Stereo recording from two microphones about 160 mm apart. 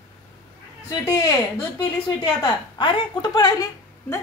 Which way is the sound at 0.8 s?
20° left (ahead or behind).